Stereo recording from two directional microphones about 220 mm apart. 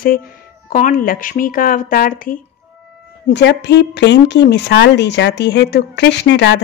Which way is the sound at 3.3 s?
50° left (ahead or behind).